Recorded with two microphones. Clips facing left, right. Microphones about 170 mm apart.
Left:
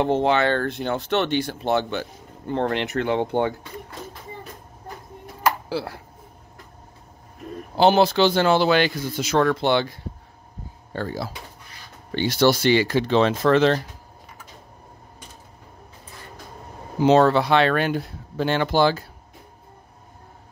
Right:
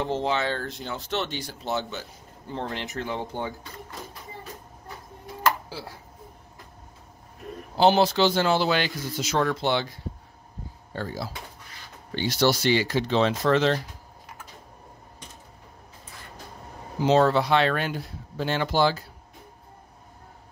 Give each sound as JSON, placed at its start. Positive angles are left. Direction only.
{"t": 0.0, "sound": "speech", "side_deg": 60}
{"t": 5.7, "sound": "speech", "side_deg": 65}
{"t": 7.7, "sound": "speech", "side_deg": 60}
{"t": 17.0, "sound": "speech", "side_deg": 65}